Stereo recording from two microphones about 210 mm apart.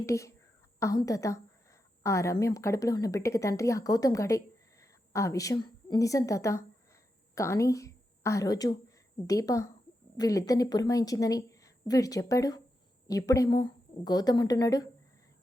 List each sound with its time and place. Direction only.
0.0 s a woman's voice: 15° left (ahead or behind)